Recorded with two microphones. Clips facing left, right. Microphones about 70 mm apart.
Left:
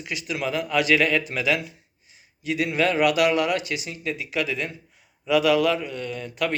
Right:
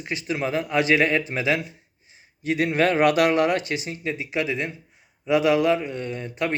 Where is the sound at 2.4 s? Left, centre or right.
Right.